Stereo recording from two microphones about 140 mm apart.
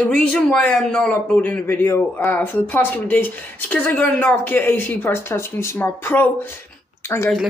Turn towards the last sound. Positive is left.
turn(degrees=15)  # may be behind; listen again after turning